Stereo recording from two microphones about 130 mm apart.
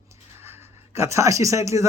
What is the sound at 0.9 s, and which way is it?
Speech, 20° right (ahead or behind).